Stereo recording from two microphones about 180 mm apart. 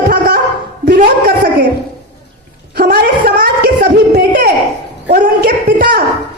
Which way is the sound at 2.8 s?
50° right (ahead or behind).